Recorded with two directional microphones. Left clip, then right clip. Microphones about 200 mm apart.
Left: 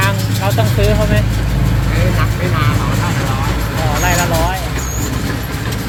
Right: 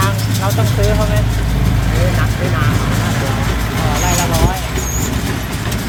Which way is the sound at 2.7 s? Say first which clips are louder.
Even; 60° right (ahead or behind).